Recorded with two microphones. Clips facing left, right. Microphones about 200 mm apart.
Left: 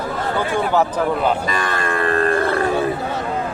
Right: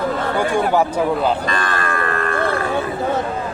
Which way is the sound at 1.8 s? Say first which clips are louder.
Left 3 dB; 35° left (ahead or behind).